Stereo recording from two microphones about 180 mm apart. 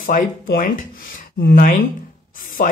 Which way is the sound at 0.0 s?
50° left (ahead or behind).